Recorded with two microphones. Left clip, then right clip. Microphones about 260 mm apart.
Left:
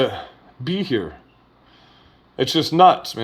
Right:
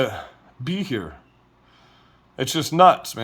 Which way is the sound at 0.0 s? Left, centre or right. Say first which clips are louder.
Left 3 dB; right.